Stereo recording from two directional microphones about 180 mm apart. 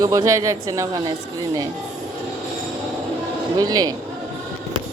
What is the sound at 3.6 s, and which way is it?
Speech, 20° right (ahead or behind).